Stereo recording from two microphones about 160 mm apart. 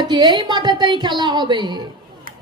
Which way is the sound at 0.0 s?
25° right (ahead or behind).